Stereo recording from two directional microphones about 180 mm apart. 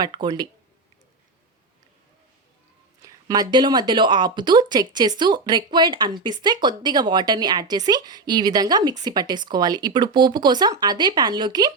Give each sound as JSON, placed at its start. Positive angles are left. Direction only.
{"t": 0.0, "sound": "speech", "side_deg": -25}
{"t": 3.0, "sound": "speech", "side_deg": -20}